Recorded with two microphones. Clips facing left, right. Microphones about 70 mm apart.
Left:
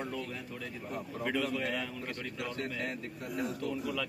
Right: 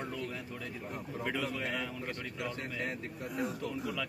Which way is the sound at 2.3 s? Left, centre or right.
Right.